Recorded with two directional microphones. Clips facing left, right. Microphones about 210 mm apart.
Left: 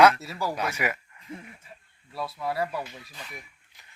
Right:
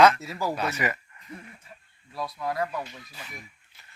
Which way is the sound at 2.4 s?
5° left (ahead or behind).